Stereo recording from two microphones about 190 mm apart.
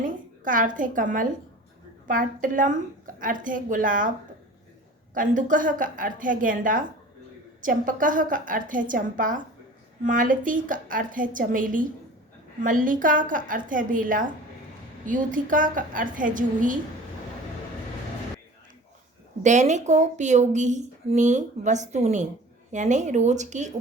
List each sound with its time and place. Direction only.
0.0 s a woman's voice: 45° right (ahead or behind)
5.1 s a woman's voice: 45° right (ahead or behind)
19.4 s a woman's voice: 40° right (ahead or behind)